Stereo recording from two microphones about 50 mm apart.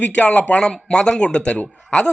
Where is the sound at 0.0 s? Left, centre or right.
Left.